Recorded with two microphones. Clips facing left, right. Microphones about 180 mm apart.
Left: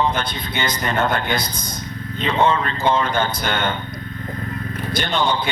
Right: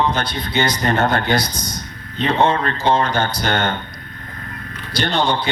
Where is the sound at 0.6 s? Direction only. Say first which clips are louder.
Right 4 dB; 55° right (ahead or behind).